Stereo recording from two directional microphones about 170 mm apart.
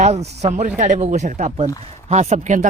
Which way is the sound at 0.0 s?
40° right (ahead or behind).